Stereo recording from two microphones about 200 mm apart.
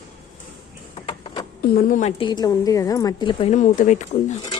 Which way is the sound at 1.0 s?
25° left (ahead or behind).